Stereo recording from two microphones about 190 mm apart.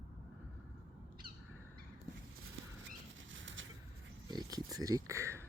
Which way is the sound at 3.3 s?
80° right.